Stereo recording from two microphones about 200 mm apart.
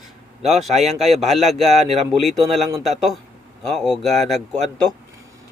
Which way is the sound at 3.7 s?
Centre (ahead or behind).